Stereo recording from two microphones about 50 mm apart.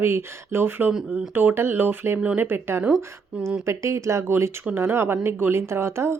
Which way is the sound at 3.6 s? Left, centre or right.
Right.